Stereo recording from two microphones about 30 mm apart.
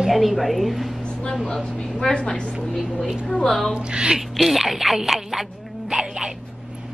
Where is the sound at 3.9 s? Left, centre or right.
Right.